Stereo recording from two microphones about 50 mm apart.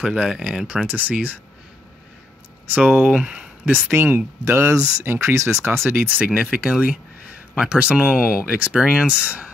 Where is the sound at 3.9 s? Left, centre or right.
Right.